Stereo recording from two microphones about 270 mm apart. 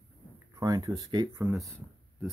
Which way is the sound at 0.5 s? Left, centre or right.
Centre.